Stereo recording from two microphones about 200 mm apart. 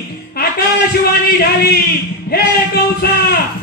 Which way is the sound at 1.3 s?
50° left (ahead or behind).